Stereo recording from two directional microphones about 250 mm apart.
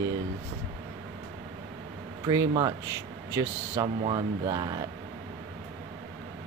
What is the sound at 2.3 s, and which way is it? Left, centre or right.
Speech, centre.